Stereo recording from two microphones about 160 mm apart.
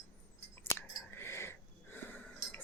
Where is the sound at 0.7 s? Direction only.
15° left (ahead or behind).